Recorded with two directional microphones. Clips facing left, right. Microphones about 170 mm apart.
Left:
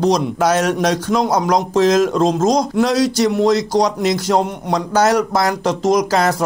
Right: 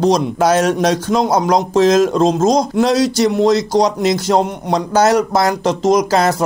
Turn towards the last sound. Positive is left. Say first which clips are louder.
# right 2 dB
turn(degrees=-25)  # may be behind; listen again after turning